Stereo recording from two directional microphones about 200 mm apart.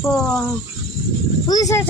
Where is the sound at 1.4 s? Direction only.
20° left (ahead or behind).